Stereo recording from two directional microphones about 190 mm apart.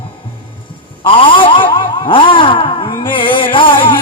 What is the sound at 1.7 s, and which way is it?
Vehicle, 25° left (ahead or behind).